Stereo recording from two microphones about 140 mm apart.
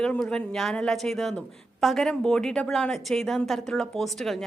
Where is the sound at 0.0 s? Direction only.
5° left (ahead or behind).